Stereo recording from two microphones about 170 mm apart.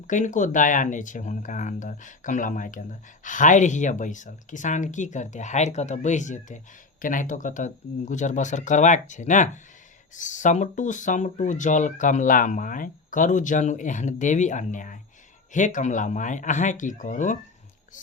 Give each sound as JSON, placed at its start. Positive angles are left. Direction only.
{"t": 0.1, "sound": "speech", "side_deg": 50}